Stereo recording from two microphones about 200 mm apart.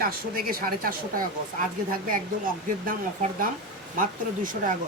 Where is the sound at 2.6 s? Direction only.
45° right (ahead or behind).